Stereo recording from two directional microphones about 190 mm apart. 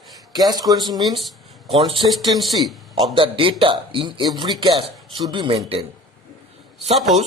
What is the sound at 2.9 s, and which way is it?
A man's voice, 25° right (ahead or behind).